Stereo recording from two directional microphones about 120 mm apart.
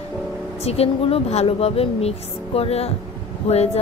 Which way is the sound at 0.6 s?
60° left (ahead or behind).